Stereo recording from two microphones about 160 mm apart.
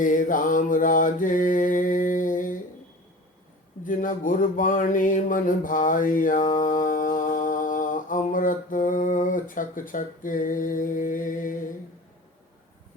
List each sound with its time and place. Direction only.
0.0 s mantra: 55° left (ahead or behind)
3.8 s mantra: 55° left (ahead or behind)